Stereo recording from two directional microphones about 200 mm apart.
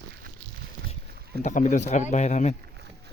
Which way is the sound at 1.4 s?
40° left (ahead or behind).